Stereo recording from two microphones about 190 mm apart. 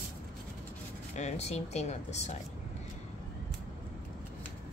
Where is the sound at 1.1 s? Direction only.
35° left (ahead or behind).